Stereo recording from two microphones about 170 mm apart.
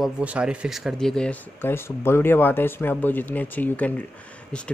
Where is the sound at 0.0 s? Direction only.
5° right (ahead or behind).